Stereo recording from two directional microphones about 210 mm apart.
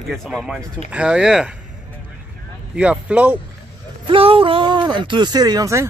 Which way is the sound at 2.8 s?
5° right (ahead or behind).